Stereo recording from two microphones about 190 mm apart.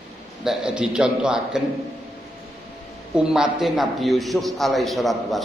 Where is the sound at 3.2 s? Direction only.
5° right (ahead or behind).